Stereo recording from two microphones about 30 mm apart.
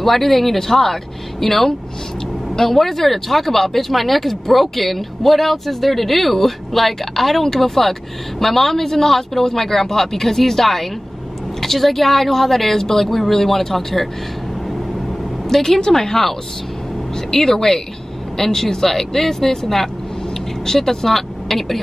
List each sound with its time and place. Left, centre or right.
0.0 s a man's voice: centre
15.4 s a woman's voice: centre